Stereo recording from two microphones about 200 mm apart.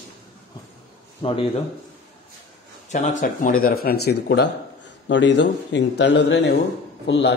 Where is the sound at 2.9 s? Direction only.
35° left (ahead or behind); by 7.3 s 60° left (ahead or behind).